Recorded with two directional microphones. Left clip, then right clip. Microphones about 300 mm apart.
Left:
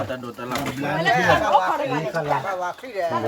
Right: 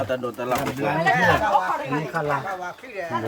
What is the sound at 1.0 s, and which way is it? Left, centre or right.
Speech, left.